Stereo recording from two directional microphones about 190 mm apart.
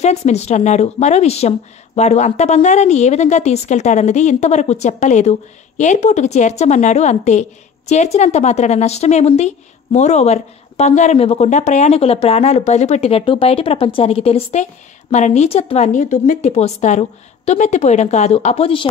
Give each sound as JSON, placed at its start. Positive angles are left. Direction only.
{"t": 0.0, "sound": "speech", "side_deg": 35}